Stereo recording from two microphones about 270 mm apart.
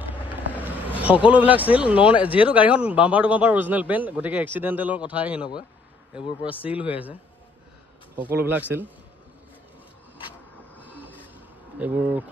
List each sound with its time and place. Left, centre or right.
0.5 s speech: centre
2.2 s speech: centre
2.5 s a man's voice: centre
6.6 s a man's voice: centre
8.2 s speech: centre
10.8 s a sound: centre
11.8 s speech: centre